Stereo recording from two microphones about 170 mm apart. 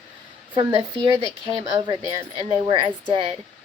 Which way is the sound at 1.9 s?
35° right (ahead or behind).